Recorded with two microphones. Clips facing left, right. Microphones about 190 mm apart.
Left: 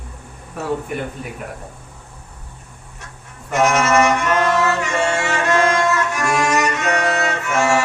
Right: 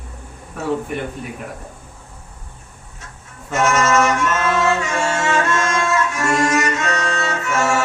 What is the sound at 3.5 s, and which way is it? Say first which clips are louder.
Music: left 1 dB; 65° left (ahead or behind).